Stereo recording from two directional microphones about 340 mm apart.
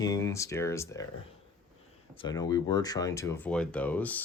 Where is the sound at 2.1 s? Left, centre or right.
Centre.